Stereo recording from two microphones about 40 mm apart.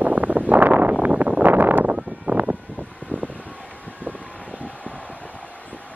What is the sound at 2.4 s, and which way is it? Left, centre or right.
Vehicle, right.